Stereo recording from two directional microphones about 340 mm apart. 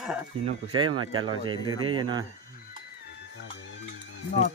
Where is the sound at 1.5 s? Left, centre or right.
Centre.